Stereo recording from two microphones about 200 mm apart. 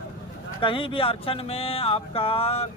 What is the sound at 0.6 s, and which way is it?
Speech, 25° left (ahead or behind).